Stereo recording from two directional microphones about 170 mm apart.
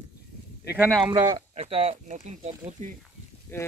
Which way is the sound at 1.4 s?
35° right (ahead or behind).